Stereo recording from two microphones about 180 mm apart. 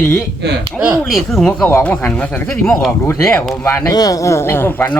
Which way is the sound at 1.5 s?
10° left (ahead or behind).